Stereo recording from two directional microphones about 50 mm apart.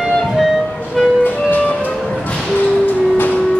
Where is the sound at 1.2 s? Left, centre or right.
Left.